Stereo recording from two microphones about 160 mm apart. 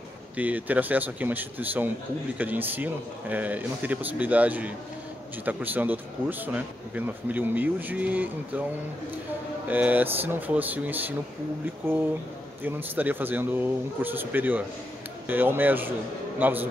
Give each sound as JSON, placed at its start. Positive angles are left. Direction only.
{"t": 0.4, "sound": "speech", "side_deg": -10}
{"t": 9.7, "sound": "speech", "side_deg": -10}
{"t": 12.6, "sound": "a man's voice", "side_deg": -10}